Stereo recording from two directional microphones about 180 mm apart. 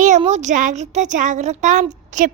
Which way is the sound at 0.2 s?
40° right (ahead or behind).